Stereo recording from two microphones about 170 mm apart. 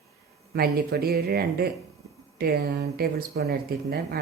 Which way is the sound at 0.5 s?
65° right (ahead or behind).